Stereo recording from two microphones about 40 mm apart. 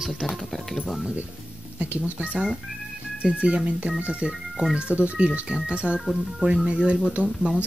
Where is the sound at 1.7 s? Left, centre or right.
Right.